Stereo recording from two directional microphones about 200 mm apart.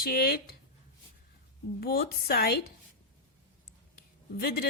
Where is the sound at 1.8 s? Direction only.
50° left (ahead or behind).